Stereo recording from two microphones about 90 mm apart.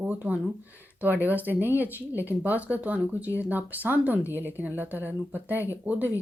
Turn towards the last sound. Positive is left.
turn(degrees=-20)  # may be behind; listen again after turning